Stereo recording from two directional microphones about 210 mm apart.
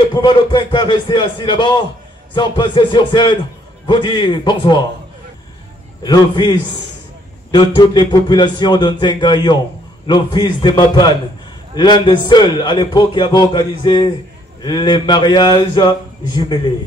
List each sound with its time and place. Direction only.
0.1 s speech: 20° left (ahead or behind)
6.0 s speech: 20° left (ahead or behind)